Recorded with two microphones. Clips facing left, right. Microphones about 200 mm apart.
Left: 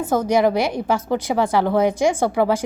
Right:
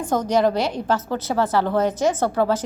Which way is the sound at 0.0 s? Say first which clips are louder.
Left 2 dB; 5° left (ahead or behind).